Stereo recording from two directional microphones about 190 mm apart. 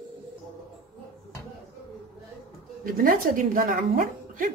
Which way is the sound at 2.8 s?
45° right (ahead or behind).